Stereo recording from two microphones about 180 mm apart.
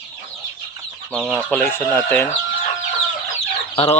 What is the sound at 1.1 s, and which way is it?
Speech, 5° right (ahead or behind).